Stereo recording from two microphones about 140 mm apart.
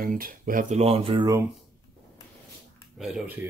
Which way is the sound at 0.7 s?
45° right (ahead or behind).